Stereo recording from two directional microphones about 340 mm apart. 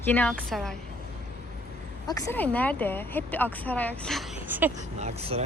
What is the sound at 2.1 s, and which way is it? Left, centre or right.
Speech, centre.